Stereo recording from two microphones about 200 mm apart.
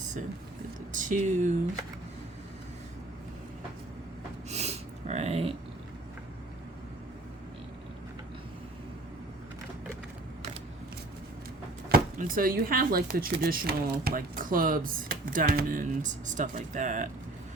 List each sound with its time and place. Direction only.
0.9 s speech: 40° right (ahead or behind)
4.4 s a sound: 35° right (ahead or behind)
11.9 s speech: 45° right (ahead or behind)